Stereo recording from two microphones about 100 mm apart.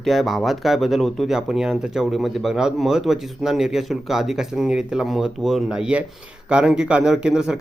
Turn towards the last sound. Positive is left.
turn(degrees=-5)  # may be behind; listen again after turning